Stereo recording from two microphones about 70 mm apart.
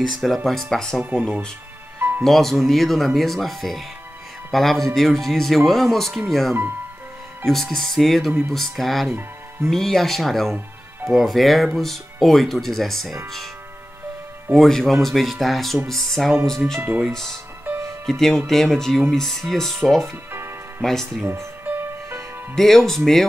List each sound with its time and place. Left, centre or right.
0.1 s speech: centre
2.0 s music: right
2.2 s speech: centre
14.5 s speech: centre
17.6 s music: right
18.5 s speech: centre
21.3 s music: right
22.6 s speech: centre